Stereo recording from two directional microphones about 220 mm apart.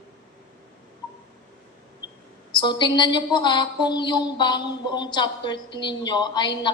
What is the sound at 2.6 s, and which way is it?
A woman's voice, 20° left (ahead or behind).